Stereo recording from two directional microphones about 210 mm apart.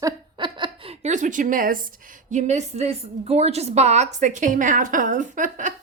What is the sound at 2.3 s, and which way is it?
A woman's voice, 35° right (ahead or behind).